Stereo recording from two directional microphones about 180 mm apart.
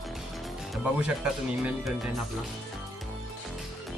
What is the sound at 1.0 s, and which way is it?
Speech, 5° right (ahead or behind).